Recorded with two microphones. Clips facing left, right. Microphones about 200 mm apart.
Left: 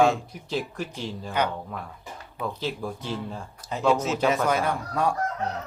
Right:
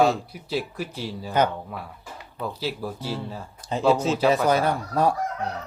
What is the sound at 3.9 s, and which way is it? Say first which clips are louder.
Speech: right 3 dB; 30° right (ahead or behind).